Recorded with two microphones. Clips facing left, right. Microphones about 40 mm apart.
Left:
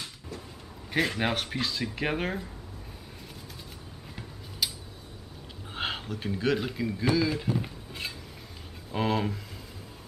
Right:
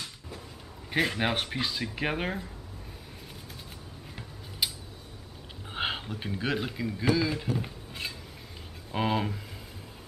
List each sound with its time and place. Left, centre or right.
0.8 s speech: centre
4.6 s tick-tock: centre
5.7 s speech: centre